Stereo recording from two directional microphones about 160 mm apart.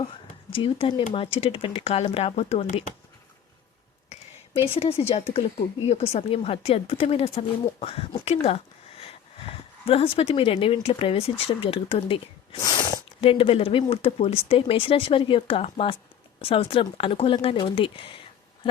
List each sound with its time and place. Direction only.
0.5 s speech: 35° left (ahead or behind)
4.1 s speech: 35° left (ahead or behind)